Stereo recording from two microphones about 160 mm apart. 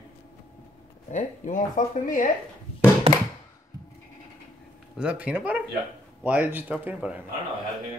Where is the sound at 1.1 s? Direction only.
50° left (ahead or behind).